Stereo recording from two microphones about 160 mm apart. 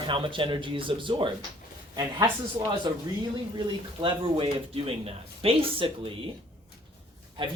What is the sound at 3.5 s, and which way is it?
Speech, 30° right (ahead or behind).